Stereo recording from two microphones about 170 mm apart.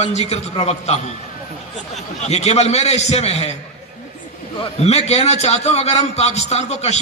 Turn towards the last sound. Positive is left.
turn(degrees=40)  # may be behind; listen again after turning